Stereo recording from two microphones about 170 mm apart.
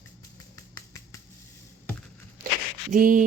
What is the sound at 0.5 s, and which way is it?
Finger snapping, 20° left (ahead or behind).